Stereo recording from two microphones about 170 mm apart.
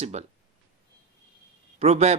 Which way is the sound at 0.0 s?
40° right (ahead or behind).